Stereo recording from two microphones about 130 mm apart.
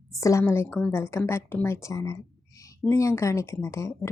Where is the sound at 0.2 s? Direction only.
25° left (ahead or behind).